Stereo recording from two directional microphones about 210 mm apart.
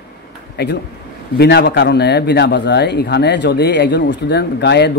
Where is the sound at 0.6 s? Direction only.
50° left (ahead or behind).